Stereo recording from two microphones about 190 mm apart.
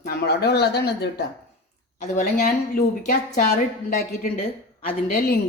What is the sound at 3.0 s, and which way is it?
A woman's voice, 50° left (ahead or behind).